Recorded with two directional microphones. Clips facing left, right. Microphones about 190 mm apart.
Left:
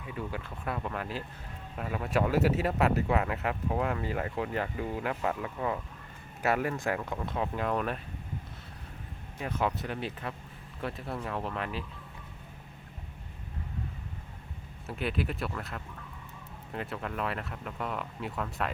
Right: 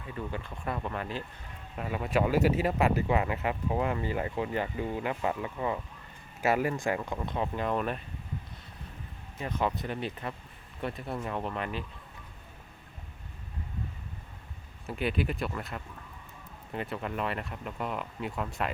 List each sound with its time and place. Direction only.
0.0 s speech: 10° left (ahead or behind)
9.4 s speech: 5° left (ahead or behind)
14.8 s speech: centre (ahead or behind)